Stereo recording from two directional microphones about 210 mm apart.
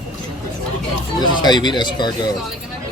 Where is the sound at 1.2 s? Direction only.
20° left (ahead or behind).